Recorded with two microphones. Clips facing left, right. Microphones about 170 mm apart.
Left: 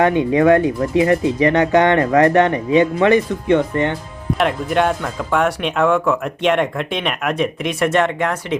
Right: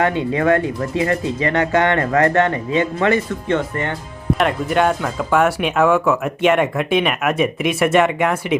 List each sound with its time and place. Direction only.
0.0 s speech: 15° left (ahead or behind)
4.4 s speech: centre (ahead or behind)